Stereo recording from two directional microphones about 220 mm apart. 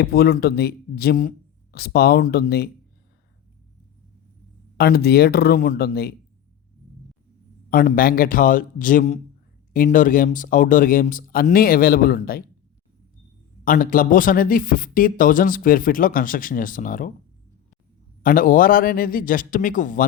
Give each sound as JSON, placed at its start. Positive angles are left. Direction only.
{"t": 0.0, "sound": "speech", "side_deg": 45}
{"t": 4.8, "sound": "speech", "side_deg": 45}
{"t": 7.7, "sound": "speech", "side_deg": 40}
{"t": 13.7, "sound": "speech", "side_deg": 40}
{"t": 18.2, "sound": "speech", "side_deg": 40}